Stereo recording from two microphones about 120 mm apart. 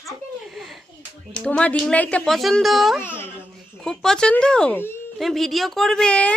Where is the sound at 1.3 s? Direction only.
10° left (ahead or behind).